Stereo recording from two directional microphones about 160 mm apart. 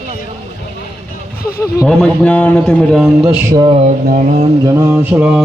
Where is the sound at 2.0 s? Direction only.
10° left (ahead or behind).